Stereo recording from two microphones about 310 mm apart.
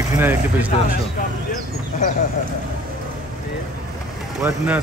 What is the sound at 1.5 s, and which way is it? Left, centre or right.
Speech, left.